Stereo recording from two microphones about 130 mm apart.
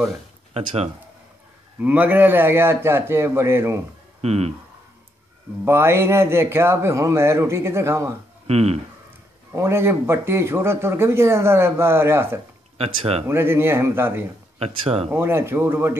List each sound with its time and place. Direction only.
0.6 s speech: 50° right (ahead or behind)
1.8 s speech: 10° right (ahead or behind)
4.2 s speech: 55° right (ahead or behind)
5.7 s speech: 20° right (ahead or behind)
8.5 s speech: 55° right (ahead or behind)
9.6 s speech: 20° right (ahead or behind)
12.7 s speech: 50° right (ahead or behind)
13.3 s speech: 15° right (ahead or behind)
14.8 s speech: 50° right (ahead or behind)
15.0 s speech: 20° right (ahead or behind)